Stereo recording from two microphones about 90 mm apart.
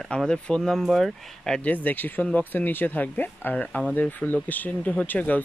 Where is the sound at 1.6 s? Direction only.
20° left (ahead or behind).